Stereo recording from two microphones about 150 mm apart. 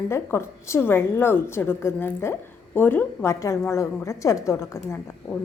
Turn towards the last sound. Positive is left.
turn(degrees=15)  # may be behind; listen again after turning